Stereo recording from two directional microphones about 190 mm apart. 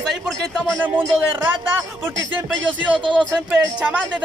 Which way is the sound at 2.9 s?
25° right (ahead or behind).